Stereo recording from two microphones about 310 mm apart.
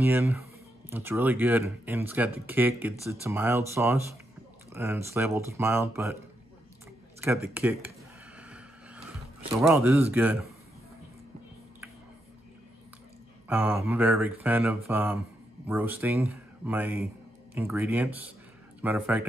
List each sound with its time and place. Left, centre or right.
0.0 s speech: centre
7.5 s speech: centre
8.4 s vehicle: centre
9.6 s speech: centre
13.5 s speech: centre